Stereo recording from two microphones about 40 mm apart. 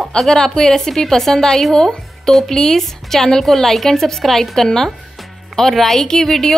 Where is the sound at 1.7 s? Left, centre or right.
Centre.